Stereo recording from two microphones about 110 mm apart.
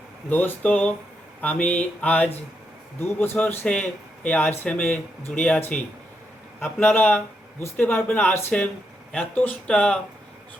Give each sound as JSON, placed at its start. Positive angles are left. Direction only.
{"t": 0.3, "sound": "speech", "side_deg": 15}